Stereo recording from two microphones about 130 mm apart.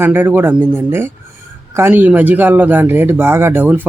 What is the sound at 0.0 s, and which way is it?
Speech, 15° right (ahead or behind).